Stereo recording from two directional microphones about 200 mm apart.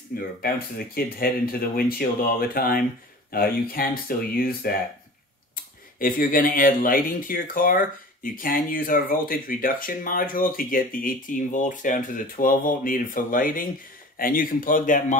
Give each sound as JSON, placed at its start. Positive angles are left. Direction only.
{"t": 0.4, "sound": "speech", "side_deg": 50}
{"t": 5.9, "sound": "speech", "side_deg": 45}